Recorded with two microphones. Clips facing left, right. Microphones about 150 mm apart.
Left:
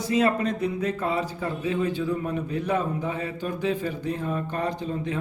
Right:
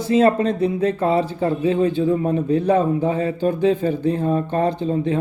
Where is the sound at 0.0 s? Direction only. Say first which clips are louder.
Right 7 dB; 30° right (ahead or behind).